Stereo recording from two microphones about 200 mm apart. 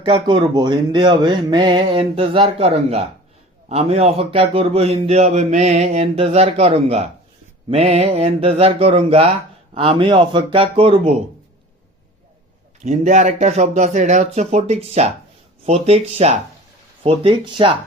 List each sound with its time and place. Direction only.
0.0 s speech: 25° right (ahead or behind)
12.8 s speech: 35° right (ahead or behind)